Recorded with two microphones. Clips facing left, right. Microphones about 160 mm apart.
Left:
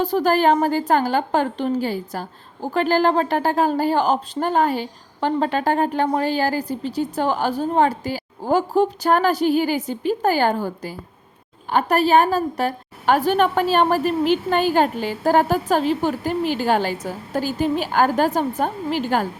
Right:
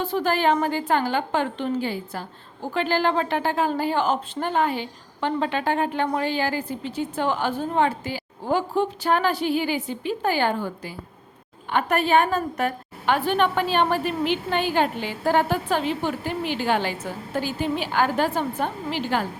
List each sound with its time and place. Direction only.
0.0 s a woman's voice: 40° left (ahead or behind)